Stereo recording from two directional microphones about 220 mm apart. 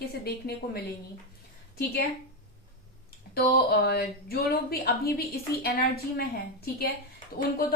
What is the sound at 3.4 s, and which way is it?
A woman's voice, 45° left (ahead or behind).